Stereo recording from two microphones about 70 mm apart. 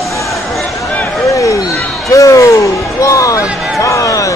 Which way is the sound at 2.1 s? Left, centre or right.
Left.